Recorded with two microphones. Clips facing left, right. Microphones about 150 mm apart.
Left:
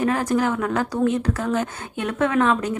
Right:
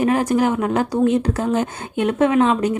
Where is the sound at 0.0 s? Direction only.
15° right (ahead or behind).